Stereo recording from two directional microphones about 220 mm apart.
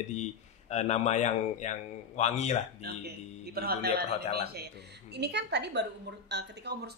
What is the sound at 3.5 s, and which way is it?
A woman's voice, 45° right (ahead or behind).